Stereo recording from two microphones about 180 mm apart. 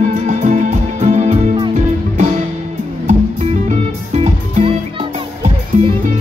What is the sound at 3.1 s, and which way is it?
Music, 40° right (ahead or behind).